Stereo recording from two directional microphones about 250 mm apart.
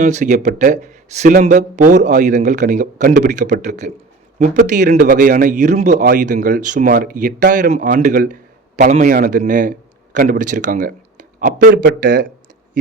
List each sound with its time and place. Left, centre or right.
0.0 s a man's voice: right